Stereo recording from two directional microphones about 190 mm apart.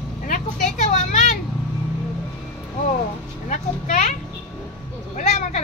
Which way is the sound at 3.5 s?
40° left (ahead or behind).